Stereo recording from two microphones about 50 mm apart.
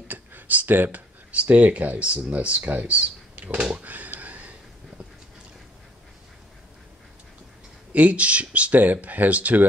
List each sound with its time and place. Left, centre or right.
0.1 s speech: right
3.8 s a sound: right
7.9 s speech: right